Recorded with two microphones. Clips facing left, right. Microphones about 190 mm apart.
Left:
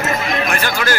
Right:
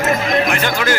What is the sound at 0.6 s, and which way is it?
Music, 20° right (ahead or behind).